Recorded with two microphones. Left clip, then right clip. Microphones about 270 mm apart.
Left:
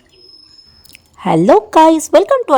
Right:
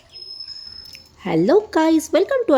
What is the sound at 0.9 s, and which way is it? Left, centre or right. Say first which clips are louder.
Speech: left 9 dB; left.